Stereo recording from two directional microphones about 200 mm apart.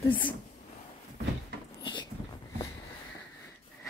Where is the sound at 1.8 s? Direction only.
25° left (ahead or behind).